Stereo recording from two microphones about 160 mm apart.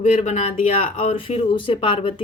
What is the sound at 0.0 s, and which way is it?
Speech, 45° left (ahead or behind).